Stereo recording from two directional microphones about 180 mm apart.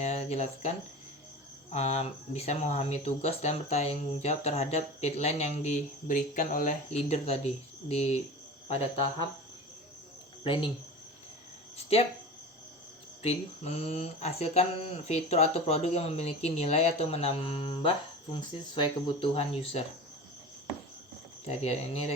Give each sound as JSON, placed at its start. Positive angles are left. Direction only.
{"t": 0.0, "sound": "a sound", "side_deg": 40}
{"t": 1.7, "sound": "speech", "side_deg": 35}
{"t": 10.4, "sound": "speech", "side_deg": 25}
{"t": 13.2, "sound": "speech", "side_deg": 35}
{"t": 21.4, "sound": "speech", "side_deg": 35}